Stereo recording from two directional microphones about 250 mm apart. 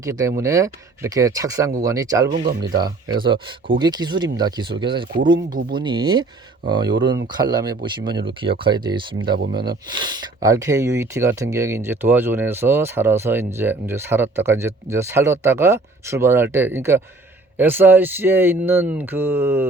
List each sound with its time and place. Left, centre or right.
0.0 s speech: centre